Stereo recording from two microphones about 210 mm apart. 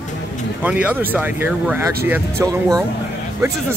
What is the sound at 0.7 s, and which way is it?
Speech, 5° right (ahead or behind).